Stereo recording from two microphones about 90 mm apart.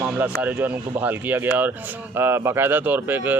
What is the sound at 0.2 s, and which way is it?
Speech, 20° right (ahead or behind).